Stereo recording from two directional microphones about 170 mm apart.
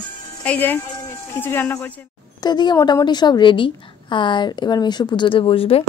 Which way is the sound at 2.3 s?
25° left (ahead or behind).